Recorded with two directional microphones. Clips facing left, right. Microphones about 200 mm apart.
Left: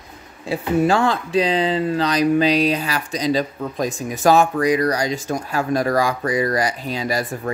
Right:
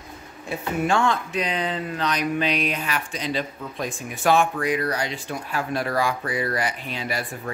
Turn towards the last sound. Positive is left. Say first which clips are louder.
# left 6 dB
turn(degrees=40)  # may be behind; listen again after turning